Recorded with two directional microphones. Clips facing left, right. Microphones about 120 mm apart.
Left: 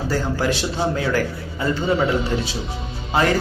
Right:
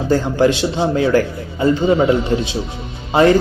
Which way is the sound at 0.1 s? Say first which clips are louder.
Right 8 dB; 25° right (ahead or behind).